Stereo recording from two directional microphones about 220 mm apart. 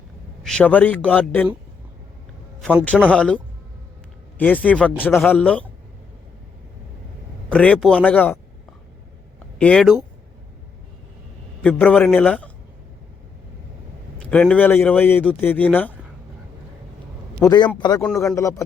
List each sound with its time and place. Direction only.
0.4 s a man's voice: 5° left (ahead or behind)
2.6 s a man's voice: 5° left (ahead or behind)
7.5 s a man's voice: 5° left (ahead or behind)
9.6 s a man's voice: 5° left (ahead or behind)
11.6 s a man's voice: 5° left (ahead or behind)
14.2 s a man's voice: 5° left (ahead or behind)
17.4 s a man's voice: 20° left (ahead or behind)